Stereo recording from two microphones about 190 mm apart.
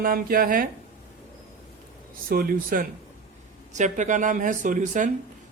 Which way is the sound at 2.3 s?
50° right (ahead or behind).